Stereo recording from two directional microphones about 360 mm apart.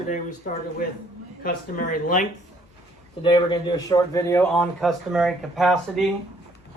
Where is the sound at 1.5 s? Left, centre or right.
Left.